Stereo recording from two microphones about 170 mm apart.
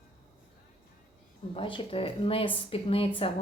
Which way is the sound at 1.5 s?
30° left (ahead or behind).